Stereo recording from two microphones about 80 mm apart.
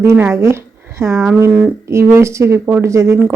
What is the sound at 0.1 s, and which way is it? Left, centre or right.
A woman's voice, right.